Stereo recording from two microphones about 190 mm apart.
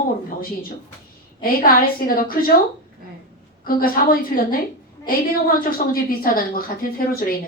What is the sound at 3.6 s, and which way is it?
Speech, 50° left (ahead or behind).